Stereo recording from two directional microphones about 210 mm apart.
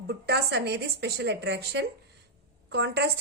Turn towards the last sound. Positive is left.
turn(degrees=-55)  # may be behind; listen again after turning